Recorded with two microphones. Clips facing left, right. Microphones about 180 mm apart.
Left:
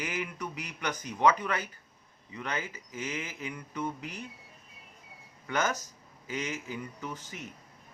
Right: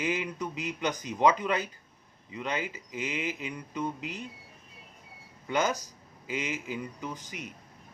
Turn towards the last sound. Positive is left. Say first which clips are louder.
# right 2 dB
turn(degrees=-15)  # may be behind; listen again after turning